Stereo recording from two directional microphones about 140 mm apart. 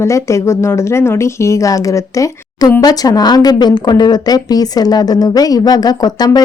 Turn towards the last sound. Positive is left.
turn(degrees=30)  # may be behind; listen again after turning